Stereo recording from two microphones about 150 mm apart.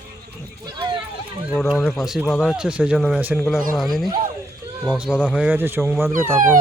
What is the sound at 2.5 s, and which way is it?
Speech, 5° right (ahead or behind).